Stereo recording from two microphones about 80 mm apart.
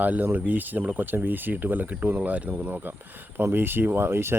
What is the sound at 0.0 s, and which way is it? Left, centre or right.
Speech, right.